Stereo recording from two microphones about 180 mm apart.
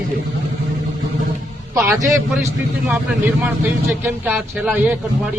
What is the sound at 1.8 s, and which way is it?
Speech, 15° right (ahead or behind).